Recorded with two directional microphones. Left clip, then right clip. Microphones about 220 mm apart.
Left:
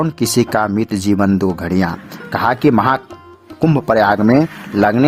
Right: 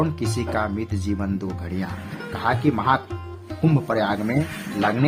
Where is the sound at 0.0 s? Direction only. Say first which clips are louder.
Left 9 dB; 50° left (ahead or behind).